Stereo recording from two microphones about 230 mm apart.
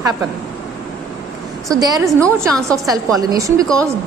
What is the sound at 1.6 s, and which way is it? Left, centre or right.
Speech, centre.